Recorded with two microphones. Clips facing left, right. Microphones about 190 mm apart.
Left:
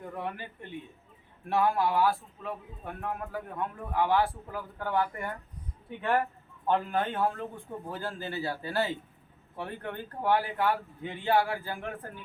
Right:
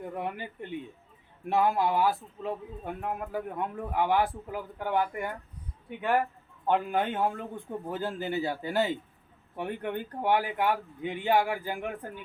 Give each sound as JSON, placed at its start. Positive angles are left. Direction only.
{"t": 0.1, "sound": "a man's voice", "side_deg": -15}
{"t": 6.7, "sound": "a man's voice", "side_deg": -15}